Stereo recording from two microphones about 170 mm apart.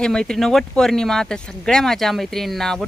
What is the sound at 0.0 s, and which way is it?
Speech, 5° left (ahead or behind).